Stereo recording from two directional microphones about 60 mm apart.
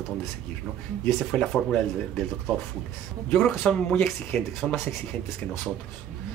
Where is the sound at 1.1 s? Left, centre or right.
Centre.